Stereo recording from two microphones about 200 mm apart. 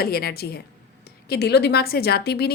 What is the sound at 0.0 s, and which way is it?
A woman's voice, 50° left (ahead or behind).